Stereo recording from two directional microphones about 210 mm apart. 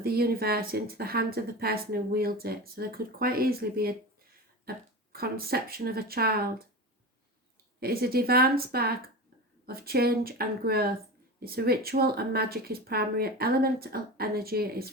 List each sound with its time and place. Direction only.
0.0 s speech: 45° right (ahead or behind)
7.8 s speech: 45° right (ahead or behind)